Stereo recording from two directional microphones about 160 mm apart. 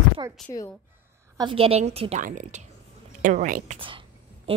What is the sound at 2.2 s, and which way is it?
A woman's voice, 55° right (ahead or behind).